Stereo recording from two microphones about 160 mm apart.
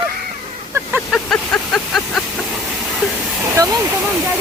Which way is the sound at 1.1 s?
Centre (ahead or behind).